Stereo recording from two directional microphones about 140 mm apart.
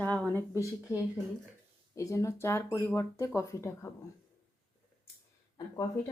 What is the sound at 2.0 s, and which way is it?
Speech, 20° left (ahead or behind).